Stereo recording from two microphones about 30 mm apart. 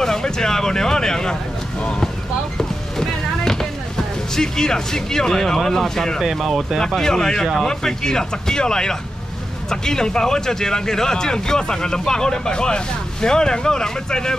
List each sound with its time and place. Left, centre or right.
0.0 s speech: centre
2.5 s vehicle: centre
4.4 s speech: left
6.2 s speech: centre
7.0 s speech: centre